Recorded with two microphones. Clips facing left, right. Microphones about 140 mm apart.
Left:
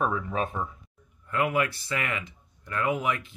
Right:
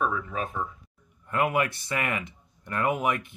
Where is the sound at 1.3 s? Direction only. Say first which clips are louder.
Right 1 dB; 20° right (ahead or behind).